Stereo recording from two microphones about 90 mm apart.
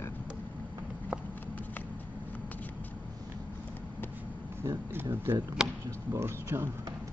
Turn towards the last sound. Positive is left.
turn(degrees=-30)  # may be behind; listen again after turning